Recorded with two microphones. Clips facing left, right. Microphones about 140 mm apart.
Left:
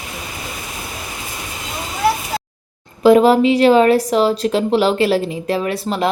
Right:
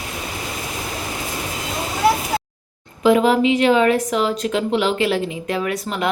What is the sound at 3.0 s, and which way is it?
A woman's voice, 35° left (ahead or behind).